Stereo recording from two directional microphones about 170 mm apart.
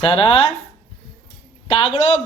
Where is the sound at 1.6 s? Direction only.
35° left (ahead or behind).